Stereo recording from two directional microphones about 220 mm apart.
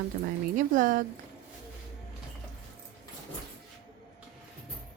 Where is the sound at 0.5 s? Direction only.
35° right (ahead or behind).